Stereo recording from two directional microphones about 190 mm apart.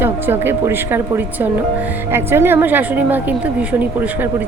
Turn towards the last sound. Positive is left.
turn(degrees=-10)  # may be behind; listen again after turning